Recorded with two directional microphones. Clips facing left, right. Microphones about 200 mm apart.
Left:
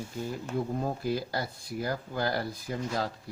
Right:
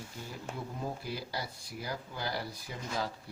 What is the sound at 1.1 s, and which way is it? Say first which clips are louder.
Speech: left 7 dB; 50° left (ahead or behind).